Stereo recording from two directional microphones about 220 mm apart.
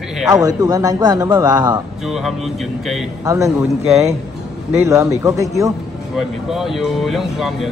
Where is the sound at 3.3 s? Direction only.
15° right (ahead or behind).